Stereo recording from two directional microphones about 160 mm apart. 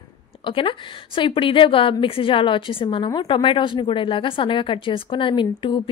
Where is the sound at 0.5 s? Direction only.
30° left (ahead or behind).